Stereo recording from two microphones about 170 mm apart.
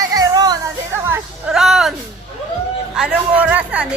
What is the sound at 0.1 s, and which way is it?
Music, 25° right (ahead or behind).